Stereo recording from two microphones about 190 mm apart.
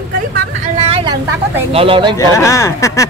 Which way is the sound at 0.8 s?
30° right (ahead or behind).